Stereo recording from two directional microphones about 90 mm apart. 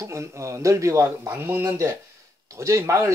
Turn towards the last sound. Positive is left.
turn(degrees=-35)  # may be behind; listen again after turning